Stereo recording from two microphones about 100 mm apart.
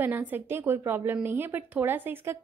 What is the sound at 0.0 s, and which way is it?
A woman's voice, 20° right (ahead or behind).